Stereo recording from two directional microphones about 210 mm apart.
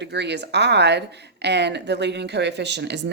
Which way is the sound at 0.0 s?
55° right (ahead or behind).